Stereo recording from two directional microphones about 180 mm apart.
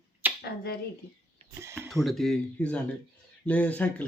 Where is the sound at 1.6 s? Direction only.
15° right (ahead or behind).